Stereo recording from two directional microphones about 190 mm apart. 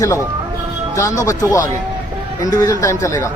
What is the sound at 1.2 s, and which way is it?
Speech, 15° left (ahead or behind).